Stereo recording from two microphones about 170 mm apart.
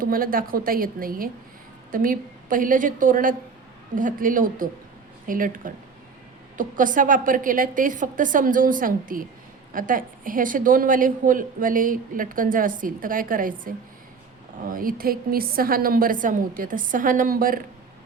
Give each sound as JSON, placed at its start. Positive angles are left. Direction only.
{"t": 0.0, "sound": "a woman's voice", "side_deg": -55}